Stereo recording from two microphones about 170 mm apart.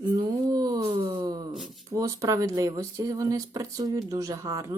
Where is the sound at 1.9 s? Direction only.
20° right (ahead or behind).